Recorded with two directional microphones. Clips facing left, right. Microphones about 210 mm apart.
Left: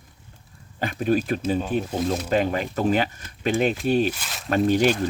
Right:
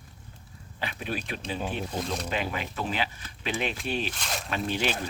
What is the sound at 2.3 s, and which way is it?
Speech, 45° left (ahead or behind).